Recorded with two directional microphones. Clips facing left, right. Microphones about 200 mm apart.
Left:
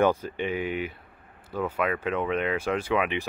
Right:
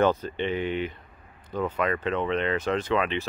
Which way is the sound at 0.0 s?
10° left (ahead or behind).